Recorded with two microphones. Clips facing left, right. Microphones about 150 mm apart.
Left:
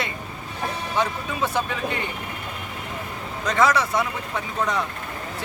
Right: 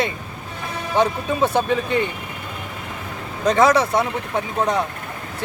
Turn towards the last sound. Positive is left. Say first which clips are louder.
# right 5 dB
turn(degrees=-20)  # may be behind; listen again after turning